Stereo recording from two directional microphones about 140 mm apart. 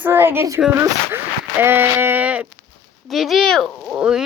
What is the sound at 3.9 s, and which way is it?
Speech, 5° right (ahead or behind).